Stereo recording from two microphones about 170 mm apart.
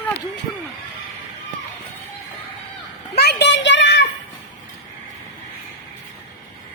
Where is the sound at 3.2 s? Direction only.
75° left (ahead or behind).